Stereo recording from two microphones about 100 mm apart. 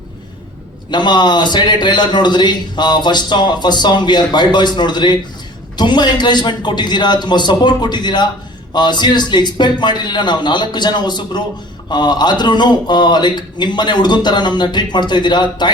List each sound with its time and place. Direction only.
0.9 s a man's voice: 50° left (ahead or behind)